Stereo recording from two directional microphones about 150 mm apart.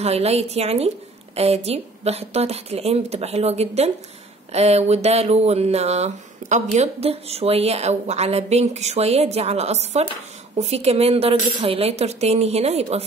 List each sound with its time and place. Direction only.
0.0 s speech: 45° right (ahead or behind)